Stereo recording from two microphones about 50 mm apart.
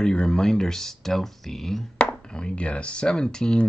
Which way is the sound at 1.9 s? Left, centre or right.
Left.